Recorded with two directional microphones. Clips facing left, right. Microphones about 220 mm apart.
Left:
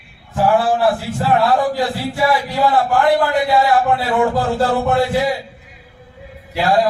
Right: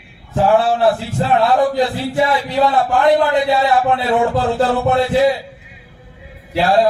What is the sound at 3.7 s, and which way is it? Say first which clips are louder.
A man's voice: right 1 dB; 20° right (ahead or behind).